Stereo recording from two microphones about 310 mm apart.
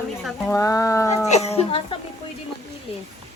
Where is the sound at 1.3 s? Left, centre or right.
Left.